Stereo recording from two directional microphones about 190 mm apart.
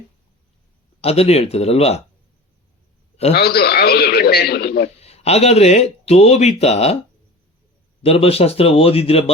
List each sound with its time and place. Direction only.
1.0 s speech: 35° left (ahead or behind)
3.3 s a man's voice: 55° left (ahead or behind)
4.9 s speech: 35° left (ahead or behind)
8.0 s speech: 30° left (ahead or behind)